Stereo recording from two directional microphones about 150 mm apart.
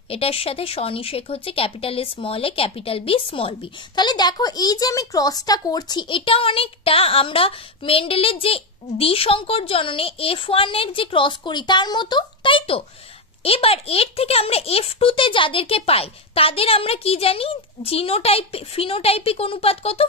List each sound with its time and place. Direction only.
0.1 s speech: 40° left (ahead or behind)